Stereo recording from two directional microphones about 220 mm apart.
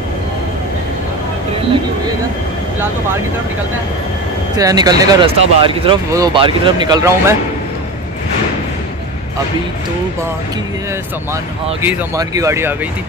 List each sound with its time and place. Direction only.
4.6 s speech: 15° right (ahead or behind)
11.8 s speech: 10° right (ahead or behind)